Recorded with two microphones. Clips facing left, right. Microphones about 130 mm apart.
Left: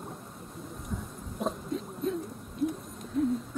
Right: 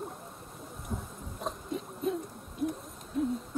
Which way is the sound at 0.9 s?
25° right (ahead or behind).